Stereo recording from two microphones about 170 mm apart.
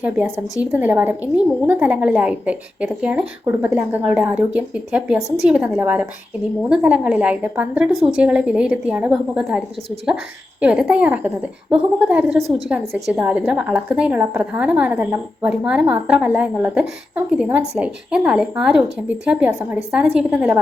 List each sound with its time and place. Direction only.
0.0 s speech: 5° right (ahead or behind)
12.4 s a woman's voice: 35° right (ahead or behind)
12.6 s speech: 5° right (ahead or behind)